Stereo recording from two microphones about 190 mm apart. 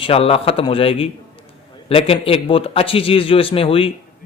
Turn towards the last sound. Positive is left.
turn(degrees=30)  # may be behind; listen again after turning